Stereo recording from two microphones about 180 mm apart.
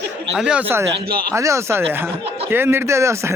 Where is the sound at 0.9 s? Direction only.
65° right (ahead or behind).